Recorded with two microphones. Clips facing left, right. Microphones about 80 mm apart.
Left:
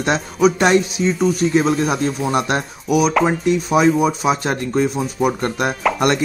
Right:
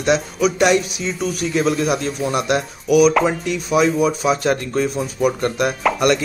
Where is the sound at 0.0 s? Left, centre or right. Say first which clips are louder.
Left 1 dB; left.